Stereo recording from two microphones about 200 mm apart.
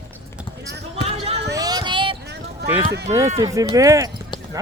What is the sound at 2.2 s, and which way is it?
Clip-clop, 55° right (ahead or behind).